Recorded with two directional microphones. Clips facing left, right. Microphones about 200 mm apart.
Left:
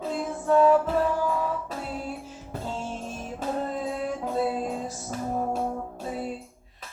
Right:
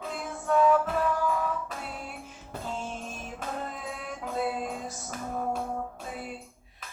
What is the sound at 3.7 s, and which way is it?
Music, 30° left (ahead or behind).